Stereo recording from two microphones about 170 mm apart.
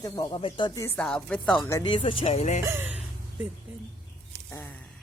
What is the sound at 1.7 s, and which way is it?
Speech, 25° left (ahead or behind).